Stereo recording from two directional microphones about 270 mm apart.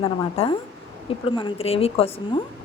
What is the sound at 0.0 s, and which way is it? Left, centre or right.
A woman's voice, left.